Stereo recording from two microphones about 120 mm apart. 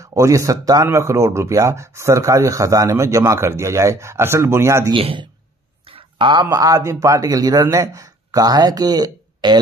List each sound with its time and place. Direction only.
0.0 s speech: 25° right (ahead or behind)
4.9 s a man's voice: 45° right (ahead or behind)
5.9 s a sound: 45° right (ahead or behind)
6.4 s speech: 30° right (ahead or behind)